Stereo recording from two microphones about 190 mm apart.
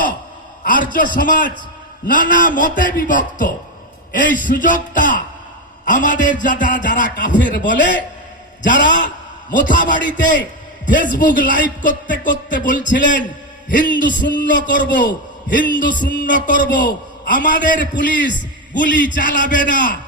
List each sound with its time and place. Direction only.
0.6 s a man's voice: 45° left (ahead or behind)
8.7 s a man's voice: 45° left (ahead or behind)